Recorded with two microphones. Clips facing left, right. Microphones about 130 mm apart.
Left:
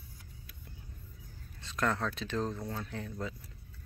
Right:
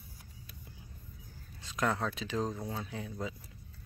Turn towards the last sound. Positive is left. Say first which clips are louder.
# even
turn(degrees=-5)  # may be behind; listen again after turning